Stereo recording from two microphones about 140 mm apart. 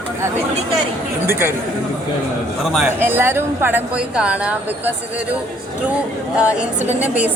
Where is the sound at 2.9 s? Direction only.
15° right (ahead or behind).